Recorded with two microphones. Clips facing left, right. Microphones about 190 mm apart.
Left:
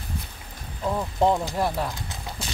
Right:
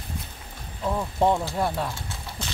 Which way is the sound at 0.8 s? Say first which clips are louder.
Left 1 dB; 5° left (ahead or behind).